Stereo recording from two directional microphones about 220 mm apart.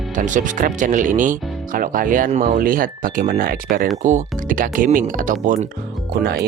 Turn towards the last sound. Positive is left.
turn(degrees=-45)  # may be behind; listen again after turning